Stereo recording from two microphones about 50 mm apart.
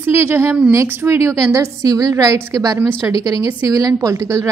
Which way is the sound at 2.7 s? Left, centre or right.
Right.